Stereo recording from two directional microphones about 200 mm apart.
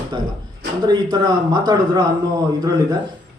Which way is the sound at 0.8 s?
20° right (ahead or behind).